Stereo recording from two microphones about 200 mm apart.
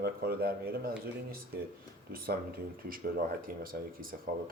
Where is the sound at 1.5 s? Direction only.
50° right (ahead or behind).